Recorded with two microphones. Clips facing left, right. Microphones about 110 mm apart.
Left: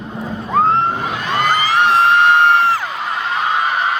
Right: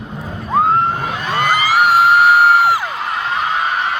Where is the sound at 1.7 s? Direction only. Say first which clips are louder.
Right 2 dB; 10° right (ahead or behind).